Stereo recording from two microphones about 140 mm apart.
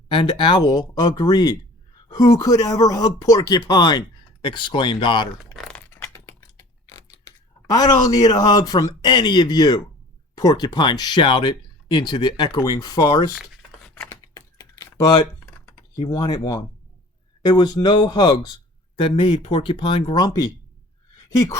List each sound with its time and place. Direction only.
0.1 s speech: 35° left (ahead or behind)
5.5 s a sound: 5° left (ahead or behind)
6.8 s speech: 25° left (ahead or behind)
13.8 s a sound: 10° left (ahead or behind)
14.3 s typing: 25° left (ahead or behind)
16.0 s speech: 30° left (ahead or behind)